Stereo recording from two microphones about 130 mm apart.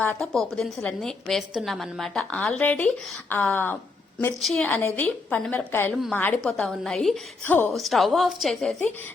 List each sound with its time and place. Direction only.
0.2 s a woman's voice: centre (ahead or behind)
4.4 s a woman's voice: centre (ahead or behind)
4.7 s a woman's voice: 15° left (ahead or behind)
6.4 s a woman's voice: 5° left (ahead or behind)
7.4 s a woman's voice: 15° left (ahead or behind)
7.7 s a woman's voice: centre (ahead or behind)